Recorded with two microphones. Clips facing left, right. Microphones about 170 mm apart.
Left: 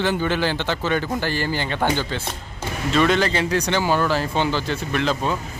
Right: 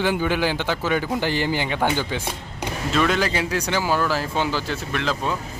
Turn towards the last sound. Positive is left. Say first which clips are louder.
# left 3 dB
turn(degrees=0)  # may be behind; listen again after turning